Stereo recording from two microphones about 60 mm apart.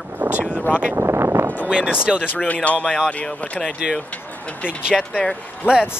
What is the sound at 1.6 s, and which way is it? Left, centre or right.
Speech, centre.